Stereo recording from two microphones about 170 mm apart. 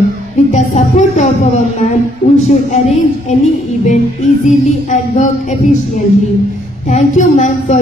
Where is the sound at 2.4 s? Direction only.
40° left (ahead or behind).